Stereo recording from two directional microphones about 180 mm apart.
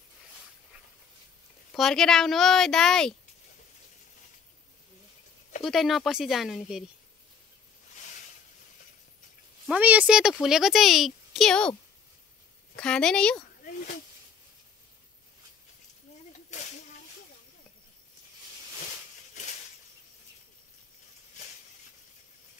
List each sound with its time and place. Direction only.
1.7 s speech: centre (ahead or behind)
5.6 s speech: centre (ahead or behind)
9.7 s speech: 10° right (ahead or behind)
12.7 s speech: 5° left (ahead or behind)
16.4 s a sound: 40° left (ahead or behind)